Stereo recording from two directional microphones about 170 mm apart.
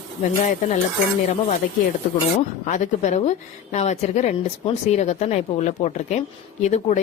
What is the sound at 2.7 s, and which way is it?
Speech, 45° left (ahead or behind).